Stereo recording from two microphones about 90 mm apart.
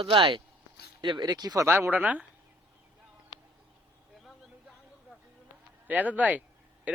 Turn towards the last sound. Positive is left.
turn(degrees=-20)  # may be behind; listen again after turning